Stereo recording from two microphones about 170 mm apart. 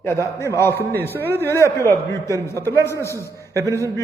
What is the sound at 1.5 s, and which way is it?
A man's voice, 15° left (ahead or behind).